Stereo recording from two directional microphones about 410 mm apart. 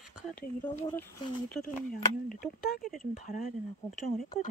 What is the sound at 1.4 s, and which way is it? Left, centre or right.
Speech, left.